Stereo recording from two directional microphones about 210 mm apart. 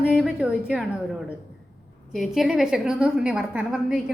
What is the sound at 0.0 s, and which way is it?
A woman's voice, 5° right (ahead or behind).